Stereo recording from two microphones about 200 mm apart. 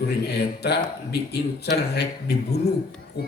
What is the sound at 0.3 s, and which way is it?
Speech, 55° left (ahead or behind).